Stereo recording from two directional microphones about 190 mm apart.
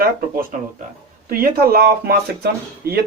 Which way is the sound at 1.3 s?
50° right (ahead or behind).